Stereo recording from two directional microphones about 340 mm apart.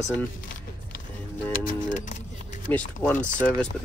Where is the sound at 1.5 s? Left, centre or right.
Left.